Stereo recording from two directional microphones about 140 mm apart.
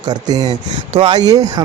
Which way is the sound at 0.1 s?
30° right (ahead or behind).